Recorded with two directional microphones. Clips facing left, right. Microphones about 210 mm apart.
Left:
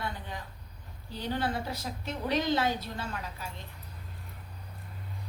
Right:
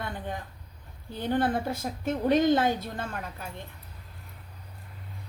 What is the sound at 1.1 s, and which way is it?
A woman's voice, 50° right (ahead or behind).